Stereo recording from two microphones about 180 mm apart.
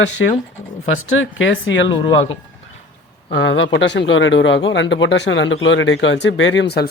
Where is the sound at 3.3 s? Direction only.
90° left; by 6.8 s 70° left (ahead or behind).